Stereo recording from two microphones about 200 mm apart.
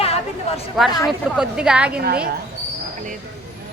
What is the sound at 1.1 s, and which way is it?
Speech, 5° right (ahead or behind).